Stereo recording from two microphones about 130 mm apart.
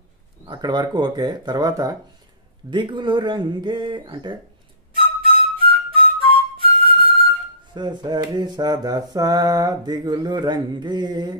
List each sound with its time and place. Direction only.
0.5 s mantra: 30° right (ahead or behind)
4.9 s music: 40° right (ahead or behind)
7.7 s mantra: 35° right (ahead or behind)